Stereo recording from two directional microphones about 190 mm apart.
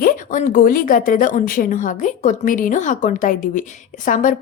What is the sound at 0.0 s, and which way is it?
Speech, 45° left (ahead or behind).